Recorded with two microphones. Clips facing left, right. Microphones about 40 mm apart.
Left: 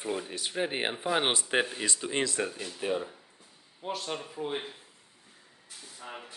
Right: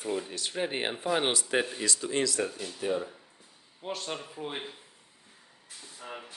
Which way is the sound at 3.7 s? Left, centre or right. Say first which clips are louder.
Left 1 dB; centre.